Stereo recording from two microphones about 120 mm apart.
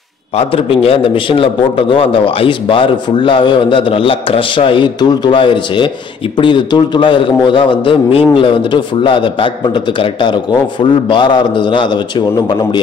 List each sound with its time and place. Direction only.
0.4 s a man's voice: 55° left (ahead or behind)
10.8 s a man's voice: 40° left (ahead or behind)